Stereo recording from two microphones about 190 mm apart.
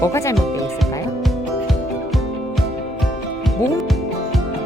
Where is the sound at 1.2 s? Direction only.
Centre (ahead or behind).